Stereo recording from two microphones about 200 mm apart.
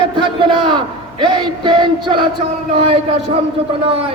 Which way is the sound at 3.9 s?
30° right (ahead or behind).